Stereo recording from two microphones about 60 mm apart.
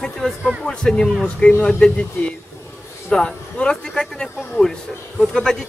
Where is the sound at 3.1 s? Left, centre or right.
Centre.